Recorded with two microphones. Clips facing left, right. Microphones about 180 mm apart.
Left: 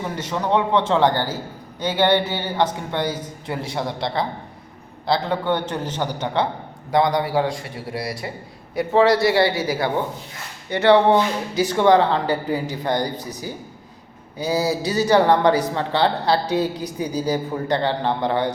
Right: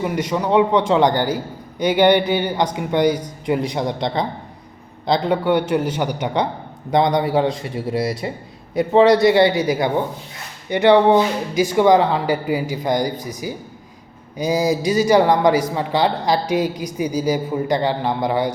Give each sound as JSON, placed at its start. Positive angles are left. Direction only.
{"t": 0.0, "sound": "a man's voice", "side_deg": -10}